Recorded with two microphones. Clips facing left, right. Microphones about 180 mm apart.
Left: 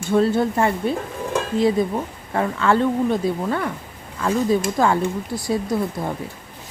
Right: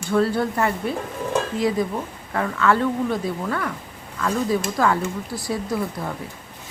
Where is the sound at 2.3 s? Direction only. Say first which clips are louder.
Left 1 dB; 25° left (ahead or behind).